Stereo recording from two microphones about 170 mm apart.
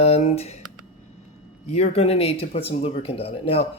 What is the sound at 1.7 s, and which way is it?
Speech, 40° left (ahead or behind).